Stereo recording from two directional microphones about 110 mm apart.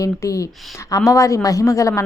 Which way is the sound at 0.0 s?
30° left (ahead or behind).